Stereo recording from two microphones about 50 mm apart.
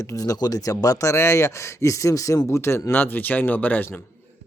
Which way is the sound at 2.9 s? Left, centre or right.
Left.